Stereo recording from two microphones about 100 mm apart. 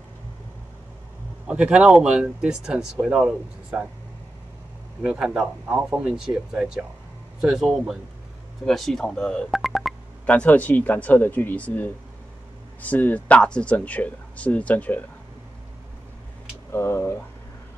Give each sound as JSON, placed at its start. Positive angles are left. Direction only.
{"t": 1.5, "sound": "speech", "side_deg": -10}
{"t": 5.0, "sound": "speech", "side_deg": -10}
{"t": 10.2, "sound": "speech", "side_deg": 15}
{"t": 16.7, "sound": "speech", "side_deg": 25}